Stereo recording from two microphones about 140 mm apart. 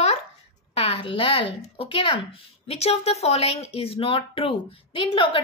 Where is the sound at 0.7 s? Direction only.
40° left (ahead or behind).